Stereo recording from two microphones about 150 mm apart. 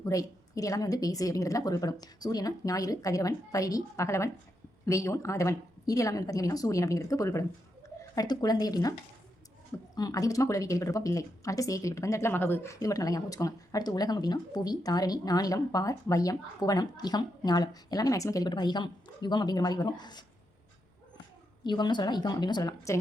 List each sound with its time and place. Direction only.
0.0 s speech: 25° left (ahead or behind)
21.6 s speech: 30° left (ahead or behind)